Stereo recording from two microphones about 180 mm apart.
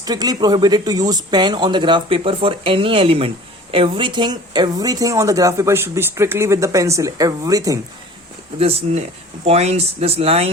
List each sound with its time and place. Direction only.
0.0 s speech: 20° right (ahead or behind)
8.5 s speech: 35° right (ahead or behind)